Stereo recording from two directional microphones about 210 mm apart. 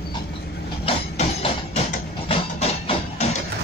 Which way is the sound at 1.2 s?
30° left (ahead or behind).